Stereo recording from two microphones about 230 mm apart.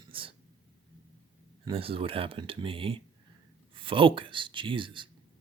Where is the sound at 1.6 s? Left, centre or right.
Right.